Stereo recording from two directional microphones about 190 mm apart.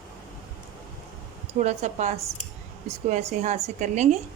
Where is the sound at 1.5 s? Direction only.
35° right (ahead or behind).